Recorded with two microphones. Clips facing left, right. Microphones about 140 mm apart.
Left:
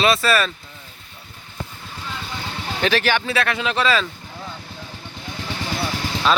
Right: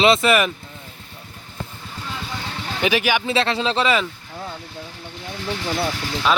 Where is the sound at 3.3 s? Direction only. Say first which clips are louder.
Right 2 dB; 25° right (ahead or behind).